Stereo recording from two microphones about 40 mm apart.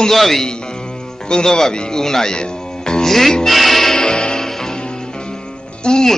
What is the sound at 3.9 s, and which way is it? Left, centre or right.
Music, centre.